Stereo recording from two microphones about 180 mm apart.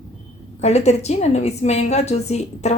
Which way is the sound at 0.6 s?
35° left (ahead or behind).